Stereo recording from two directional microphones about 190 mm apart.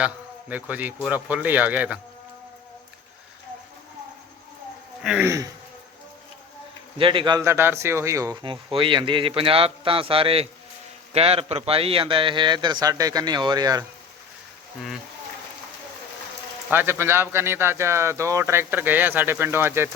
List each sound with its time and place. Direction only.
0.0 s a man's voice: 5° right (ahead or behind)
5.0 s speech: 5° right (ahead or behind)
7.0 s speech: 25° right (ahead or behind)
16.6 s speech: 10° right (ahead or behind)